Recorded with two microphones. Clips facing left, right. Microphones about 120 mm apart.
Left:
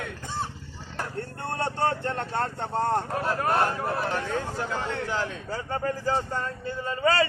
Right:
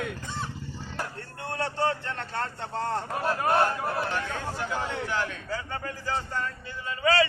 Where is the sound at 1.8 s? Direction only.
45° left (ahead or behind).